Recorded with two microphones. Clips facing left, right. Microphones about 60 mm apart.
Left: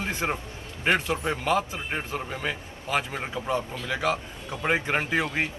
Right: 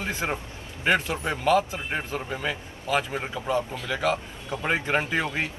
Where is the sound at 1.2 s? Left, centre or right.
Centre.